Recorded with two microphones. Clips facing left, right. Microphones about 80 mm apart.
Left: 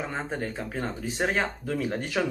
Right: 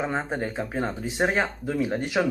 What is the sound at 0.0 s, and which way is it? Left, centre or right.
Speech, right.